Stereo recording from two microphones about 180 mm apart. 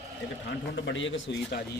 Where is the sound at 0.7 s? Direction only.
90° left; by 1.6 s 70° left (ahead or behind).